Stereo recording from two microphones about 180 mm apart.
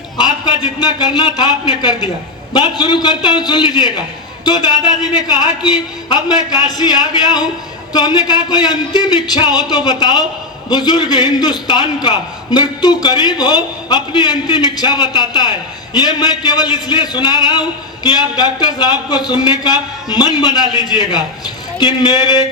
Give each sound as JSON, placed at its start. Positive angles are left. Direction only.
{"t": 0.2, "sound": "a man's voice", "side_deg": 25}